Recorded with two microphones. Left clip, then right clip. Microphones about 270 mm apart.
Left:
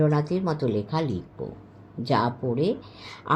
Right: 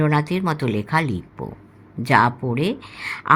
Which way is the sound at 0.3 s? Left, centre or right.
Right.